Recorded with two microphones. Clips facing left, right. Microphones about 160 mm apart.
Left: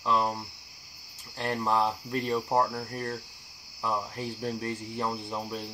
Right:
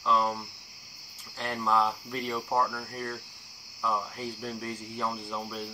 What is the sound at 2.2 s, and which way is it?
Speech, 30° left (ahead or behind).